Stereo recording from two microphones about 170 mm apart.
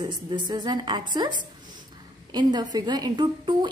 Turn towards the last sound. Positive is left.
turn(degrees=-25)  # may be behind; listen again after turning